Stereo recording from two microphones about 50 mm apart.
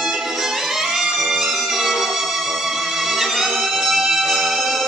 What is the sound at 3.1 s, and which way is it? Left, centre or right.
Music, centre.